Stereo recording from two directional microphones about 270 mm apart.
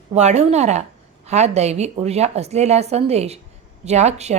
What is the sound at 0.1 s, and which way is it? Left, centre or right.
A woman's voice, right.